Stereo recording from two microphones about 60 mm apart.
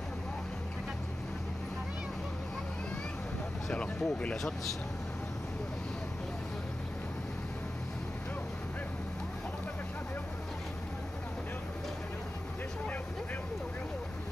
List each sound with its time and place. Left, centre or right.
3.7 s speech: left